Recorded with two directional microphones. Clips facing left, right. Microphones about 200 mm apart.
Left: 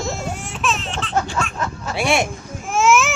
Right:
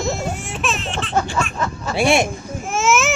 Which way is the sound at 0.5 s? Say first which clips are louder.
Left 2 dB; 5° right (ahead or behind).